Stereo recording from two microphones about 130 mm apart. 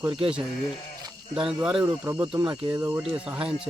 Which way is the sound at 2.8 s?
15° right (ahead or behind).